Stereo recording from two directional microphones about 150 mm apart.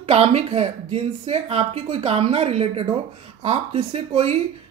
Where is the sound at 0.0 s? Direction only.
45° right (ahead or behind).